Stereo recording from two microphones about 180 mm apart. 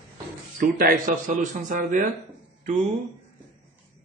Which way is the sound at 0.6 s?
50° right (ahead or behind).